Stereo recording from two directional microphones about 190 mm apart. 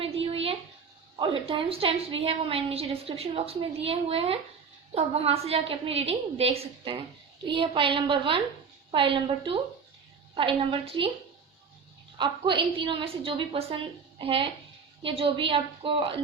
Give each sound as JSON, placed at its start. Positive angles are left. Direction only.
{"t": 0.0, "sound": "a sound", "side_deg": -30}
{"t": 1.1, "sound": "a woman's voice", "side_deg": -25}
{"t": 12.1, "sound": "a woman's voice", "side_deg": -25}